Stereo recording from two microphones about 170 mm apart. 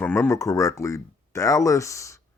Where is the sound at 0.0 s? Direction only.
15° left (ahead or behind).